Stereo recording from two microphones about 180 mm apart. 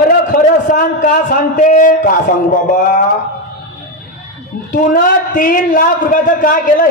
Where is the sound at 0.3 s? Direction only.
50° left (ahead or behind).